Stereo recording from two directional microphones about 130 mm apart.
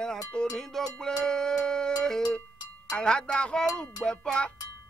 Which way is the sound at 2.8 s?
5° left (ahead or behind).